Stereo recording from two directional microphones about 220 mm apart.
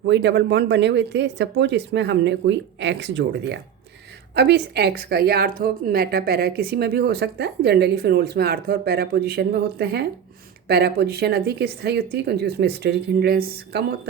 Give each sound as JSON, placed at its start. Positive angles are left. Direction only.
{"t": 0.0, "sound": "a woman's voice", "side_deg": -50}